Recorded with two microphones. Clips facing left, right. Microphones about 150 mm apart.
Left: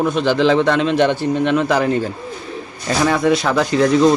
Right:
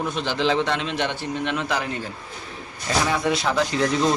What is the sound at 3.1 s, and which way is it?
Speech, 60° left (ahead or behind).